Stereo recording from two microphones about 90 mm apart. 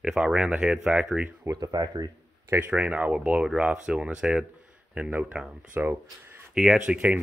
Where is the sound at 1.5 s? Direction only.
45° right (ahead or behind).